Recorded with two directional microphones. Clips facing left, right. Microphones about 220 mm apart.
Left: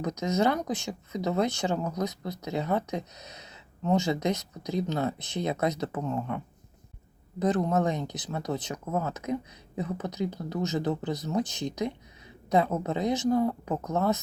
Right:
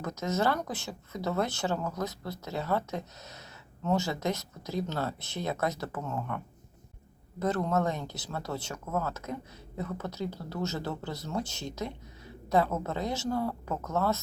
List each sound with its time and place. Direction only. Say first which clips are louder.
0.0 s speech: left 3 dB; 15° left (ahead or behind)